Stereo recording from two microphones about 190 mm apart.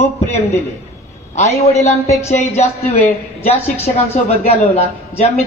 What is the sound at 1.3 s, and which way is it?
Speech, 35° left (ahead or behind).